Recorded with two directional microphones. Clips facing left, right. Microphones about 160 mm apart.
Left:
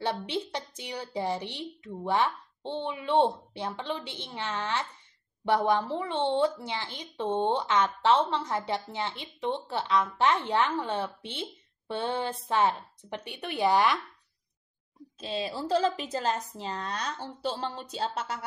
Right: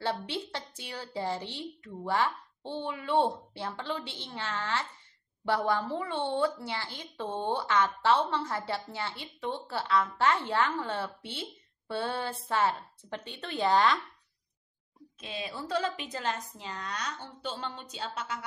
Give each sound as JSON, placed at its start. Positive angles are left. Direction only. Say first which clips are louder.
{"t": 0.0, "sound": "a woman's voice", "louder": "left 2 dB", "side_deg": 15}
{"t": 15.1, "sound": "a woman's voice", "louder": "left 6 dB", "side_deg": 30}